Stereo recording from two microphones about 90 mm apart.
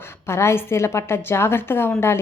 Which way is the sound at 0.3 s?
30° left (ahead or behind).